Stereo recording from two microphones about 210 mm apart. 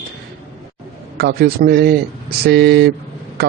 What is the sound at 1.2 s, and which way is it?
A man's voice, 50° right (ahead or behind).